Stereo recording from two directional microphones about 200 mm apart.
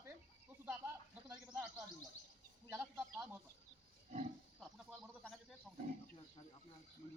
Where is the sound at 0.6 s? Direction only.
5° right (ahead or behind).